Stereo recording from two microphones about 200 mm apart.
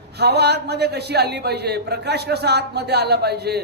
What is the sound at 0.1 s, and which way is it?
A man's voice, 55° right (ahead or behind).